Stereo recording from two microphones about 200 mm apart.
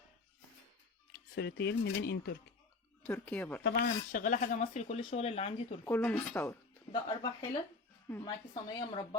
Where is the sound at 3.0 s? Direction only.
5° left (ahead or behind).